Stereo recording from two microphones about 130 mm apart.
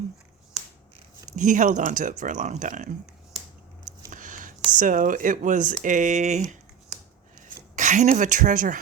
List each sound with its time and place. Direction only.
1.4 s speech: 75° right (ahead or behind)
4.1 s a sound: 80° right
4.8 s speech: 90° right